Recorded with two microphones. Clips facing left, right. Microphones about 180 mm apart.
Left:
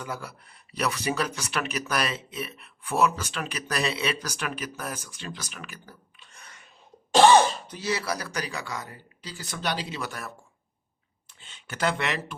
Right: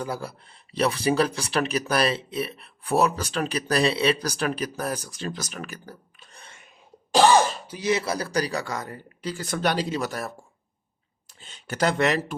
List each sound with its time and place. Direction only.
0.0 s speech: 30° right (ahead or behind)
6.4 s sneeze: 25° right (ahead or behind)
7.1 s cough: 5° right (ahead or behind)
7.8 s speech: 20° right (ahead or behind); by 12.2 s 40° right (ahead or behind)